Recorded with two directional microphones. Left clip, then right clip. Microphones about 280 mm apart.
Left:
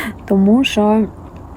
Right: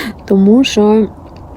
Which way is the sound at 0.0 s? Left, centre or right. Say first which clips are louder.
Right 4 dB; centre.